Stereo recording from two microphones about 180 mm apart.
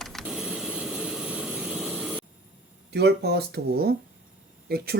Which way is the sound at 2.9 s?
65° right (ahead or behind).